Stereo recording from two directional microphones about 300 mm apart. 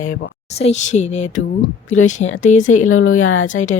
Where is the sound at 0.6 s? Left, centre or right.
Left.